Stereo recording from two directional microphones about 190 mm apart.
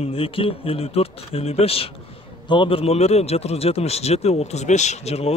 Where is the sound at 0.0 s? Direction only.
30° left (ahead or behind).